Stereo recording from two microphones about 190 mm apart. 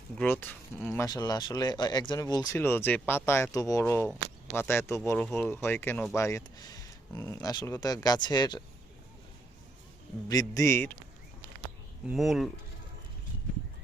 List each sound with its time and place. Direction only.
0.2 s speech: 10° left (ahead or behind)
10.2 s speech: 20° left (ahead or behind)
12.0 s speech: centre (ahead or behind)